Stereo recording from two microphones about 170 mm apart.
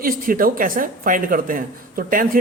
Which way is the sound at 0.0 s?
55° right (ahead or behind).